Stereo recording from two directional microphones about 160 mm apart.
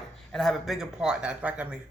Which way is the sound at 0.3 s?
Centre (ahead or behind).